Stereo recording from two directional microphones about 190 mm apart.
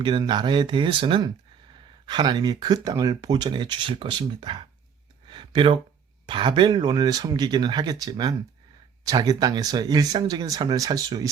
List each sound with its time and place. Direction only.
0.0 s speech: 25° right (ahead or behind)
5.3 s a sound: 25° right (ahead or behind)
6.2 s speech: 25° right (ahead or behind)